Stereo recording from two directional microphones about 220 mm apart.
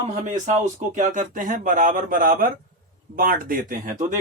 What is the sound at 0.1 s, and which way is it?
Speech, 35° right (ahead or behind).